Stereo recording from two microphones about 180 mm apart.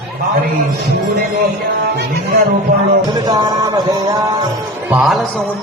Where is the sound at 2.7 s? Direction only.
40° right (ahead or behind).